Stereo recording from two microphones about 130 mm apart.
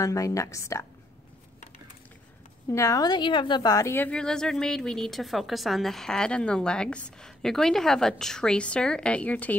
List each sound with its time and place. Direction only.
0.0 s a woman's voice: 25° left (ahead or behind)
2.7 s a woman's voice: 25° left (ahead or behind)